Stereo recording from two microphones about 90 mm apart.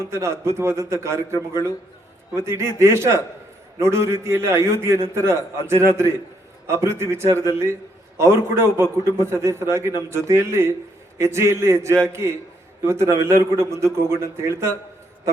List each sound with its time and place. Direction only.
0.0 s a man's voice: 30° right (ahead or behind)